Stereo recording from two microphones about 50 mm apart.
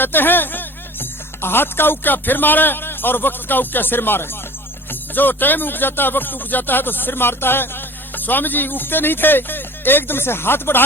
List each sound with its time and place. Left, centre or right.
0.0 s speech: left